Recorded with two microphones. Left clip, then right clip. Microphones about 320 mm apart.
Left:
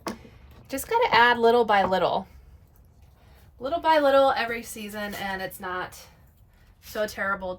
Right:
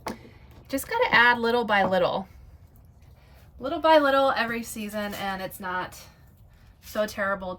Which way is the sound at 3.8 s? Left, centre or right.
Centre.